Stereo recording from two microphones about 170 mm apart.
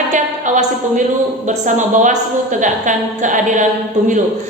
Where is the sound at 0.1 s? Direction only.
45° right (ahead or behind).